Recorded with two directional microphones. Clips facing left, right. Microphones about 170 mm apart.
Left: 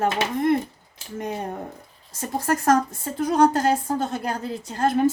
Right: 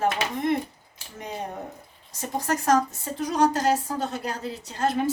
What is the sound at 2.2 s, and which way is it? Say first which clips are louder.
A woman's voice: left 3 dB; 50° left (ahead or behind).